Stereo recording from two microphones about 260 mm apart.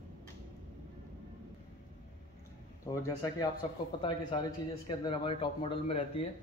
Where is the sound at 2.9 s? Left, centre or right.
Centre.